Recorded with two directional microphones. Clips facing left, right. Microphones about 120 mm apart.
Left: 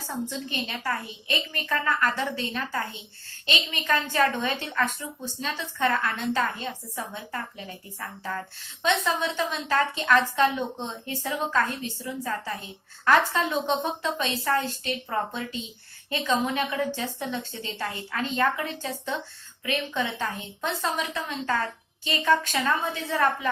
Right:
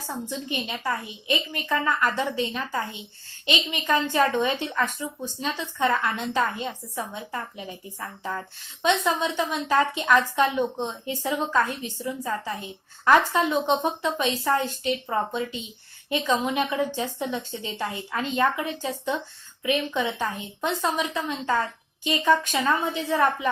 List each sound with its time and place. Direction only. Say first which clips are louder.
0.0 s a woman's voice: even; 15° right (ahead or behind)